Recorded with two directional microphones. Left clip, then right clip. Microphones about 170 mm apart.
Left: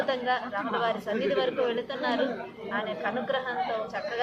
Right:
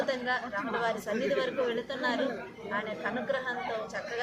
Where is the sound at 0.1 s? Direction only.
Centre (ahead or behind).